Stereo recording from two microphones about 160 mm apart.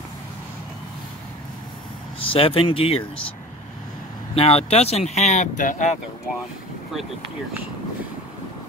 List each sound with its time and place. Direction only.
2.2 s speech: 35° left (ahead or behind)
4.4 s speech: 40° left (ahead or behind)